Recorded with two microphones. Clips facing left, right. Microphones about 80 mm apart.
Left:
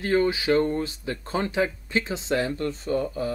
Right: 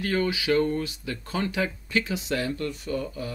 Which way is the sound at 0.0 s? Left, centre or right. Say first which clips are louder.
Left 4 dB; left.